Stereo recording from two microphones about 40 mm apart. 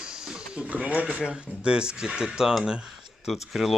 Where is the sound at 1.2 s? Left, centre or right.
Right.